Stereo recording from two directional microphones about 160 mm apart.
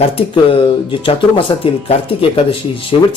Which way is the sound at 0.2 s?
35° left (ahead or behind).